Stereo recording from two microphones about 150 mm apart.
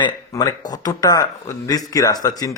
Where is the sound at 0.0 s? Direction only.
25° left (ahead or behind).